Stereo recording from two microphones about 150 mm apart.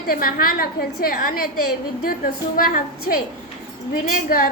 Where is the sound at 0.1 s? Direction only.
80° left.